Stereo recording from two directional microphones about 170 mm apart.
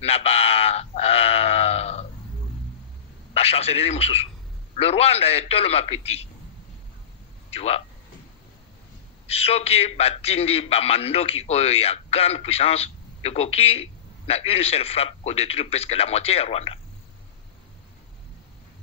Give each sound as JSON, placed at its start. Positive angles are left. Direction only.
{"t": 0.0, "sound": "sheep", "side_deg": 35}
{"t": 3.3, "sound": "a man's voice", "side_deg": 35}
{"t": 7.5, "sound": "speech", "side_deg": 35}
{"t": 9.3, "sound": "a man's voice", "side_deg": 35}